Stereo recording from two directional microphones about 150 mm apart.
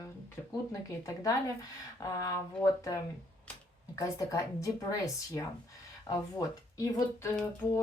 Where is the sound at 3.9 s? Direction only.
20° left (ahead or behind).